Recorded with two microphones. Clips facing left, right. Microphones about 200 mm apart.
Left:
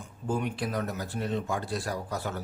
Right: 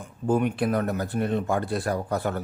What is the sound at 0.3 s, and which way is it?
Speech, 55° right (ahead or behind).